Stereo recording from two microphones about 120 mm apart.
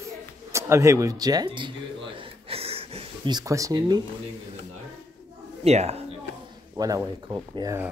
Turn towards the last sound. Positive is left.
turn(degrees=-30)  # may be behind; listen again after turning